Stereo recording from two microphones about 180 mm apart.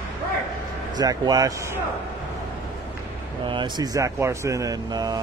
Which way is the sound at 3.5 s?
25° right (ahead or behind).